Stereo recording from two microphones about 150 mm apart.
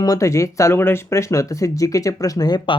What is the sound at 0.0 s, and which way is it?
Speech, 20° left (ahead or behind).